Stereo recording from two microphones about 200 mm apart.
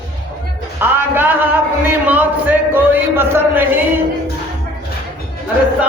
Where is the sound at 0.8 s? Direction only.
10° right (ahead or behind).